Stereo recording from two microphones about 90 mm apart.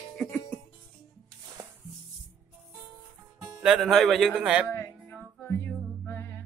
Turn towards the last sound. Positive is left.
turn(degrees=20)  # may be behind; listen again after turning